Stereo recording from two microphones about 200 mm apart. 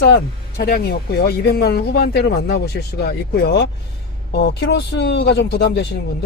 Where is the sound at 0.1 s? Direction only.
50° left (ahead or behind).